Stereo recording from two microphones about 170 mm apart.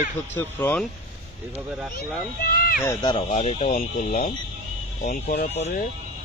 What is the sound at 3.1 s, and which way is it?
Speech, 40° left (ahead or behind).